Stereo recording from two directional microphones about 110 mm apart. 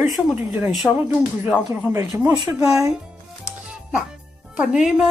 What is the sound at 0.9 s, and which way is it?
Speech, centre (ahead or behind).